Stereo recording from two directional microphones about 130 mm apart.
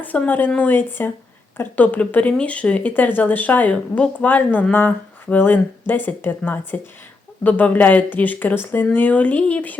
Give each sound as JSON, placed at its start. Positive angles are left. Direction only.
{"t": 0.0, "sound": "speech", "side_deg": 15}